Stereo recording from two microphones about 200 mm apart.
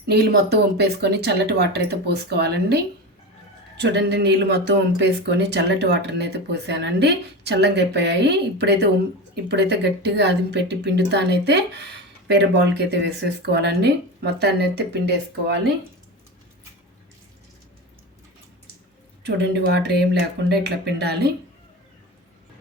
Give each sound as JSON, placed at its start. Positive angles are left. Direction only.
{"t": 0.0, "sound": "speech", "side_deg": -55}
{"t": 19.2, "sound": "speech", "side_deg": -55}